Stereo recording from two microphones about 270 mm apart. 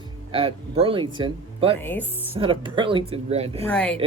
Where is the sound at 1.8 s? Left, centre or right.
Centre.